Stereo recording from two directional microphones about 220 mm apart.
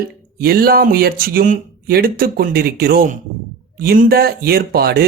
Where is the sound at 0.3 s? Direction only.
45° right (ahead or behind).